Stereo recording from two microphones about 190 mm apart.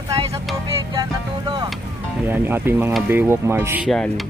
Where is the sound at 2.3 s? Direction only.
10° right (ahead or behind).